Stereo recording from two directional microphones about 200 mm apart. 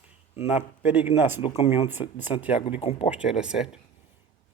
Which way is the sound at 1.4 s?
25° left (ahead or behind).